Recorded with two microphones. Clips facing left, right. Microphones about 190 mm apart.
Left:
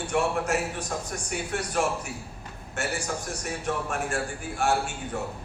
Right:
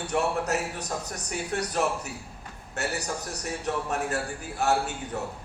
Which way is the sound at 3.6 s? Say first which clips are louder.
Right 1 dB; 35° right (ahead or behind).